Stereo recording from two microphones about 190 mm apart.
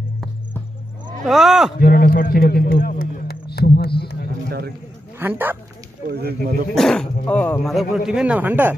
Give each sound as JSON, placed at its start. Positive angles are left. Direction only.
{"t": 1.2, "sound": "speech", "side_deg": 0}
{"t": 1.8, "sound": "a man's voice", "side_deg": 50}
{"t": 4.0, "sound": "a sound", "side_deg": 55}
{"t": 5.2, "sound": "speech", "side_deg": -10}
{"t": 6.0, "sound": "speech", "side_deg": -55}
{"t": 6.7, "sound": "speech", "side_deg": 0}